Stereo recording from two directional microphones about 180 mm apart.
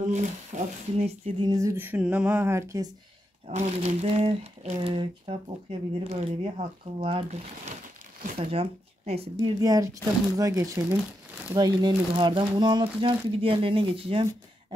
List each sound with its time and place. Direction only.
0.0 s speech: 40° right (ahead or behind)
1.5 s speech: 15° right (ahead or behind)
3.4 s speech: 40° right (ahead or behind)
9.6 s speech: 20° right (ahead or behind)